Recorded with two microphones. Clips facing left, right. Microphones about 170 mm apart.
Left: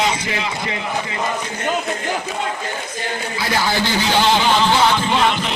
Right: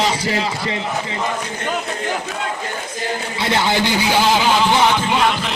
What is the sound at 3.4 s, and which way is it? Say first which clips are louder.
Speech: right 2 dB; 20° right (ahead or behind).